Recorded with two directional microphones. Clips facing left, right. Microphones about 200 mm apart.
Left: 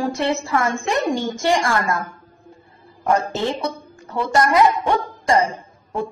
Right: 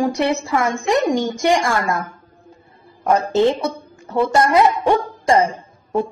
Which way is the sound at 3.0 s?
20° right (ahead or behind).